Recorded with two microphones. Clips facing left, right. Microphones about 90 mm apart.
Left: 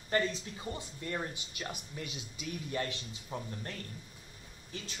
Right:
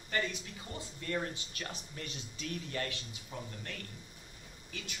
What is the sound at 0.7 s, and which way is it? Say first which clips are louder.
Speech: right 4 dB; 20° left (ahead or behind).